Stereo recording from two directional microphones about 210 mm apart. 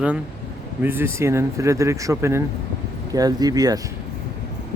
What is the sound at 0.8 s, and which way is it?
Speech, 10° right (ahead or behind).